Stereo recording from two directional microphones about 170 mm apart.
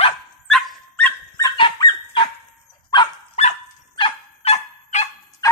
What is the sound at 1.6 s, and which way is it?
Dog, 25° left (ahead or behind).